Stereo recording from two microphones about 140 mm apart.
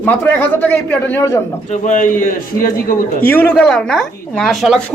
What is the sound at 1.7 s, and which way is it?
A man's voice, 60° left (ahead or behind).